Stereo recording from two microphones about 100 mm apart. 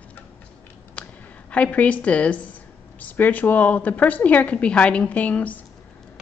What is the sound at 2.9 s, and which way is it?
A woman's voice, 15° left (ahead or behind).